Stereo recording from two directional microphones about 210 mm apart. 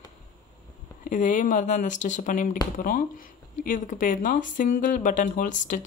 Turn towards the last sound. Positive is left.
turn(degrees=35)  # may be behind; listen again after turning